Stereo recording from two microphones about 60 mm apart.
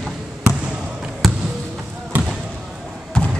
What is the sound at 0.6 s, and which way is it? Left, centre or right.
Basketball bounce, centre.